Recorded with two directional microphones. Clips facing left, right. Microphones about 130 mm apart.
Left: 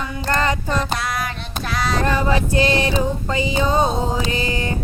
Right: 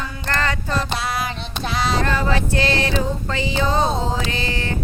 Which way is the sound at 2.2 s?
20° left (ahead or behind).